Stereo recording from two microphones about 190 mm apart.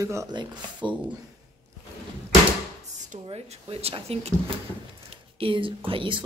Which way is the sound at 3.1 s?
30° right (ahead or behind).